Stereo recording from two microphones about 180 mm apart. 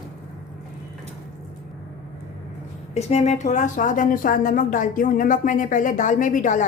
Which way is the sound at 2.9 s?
35° left (ahead or behind).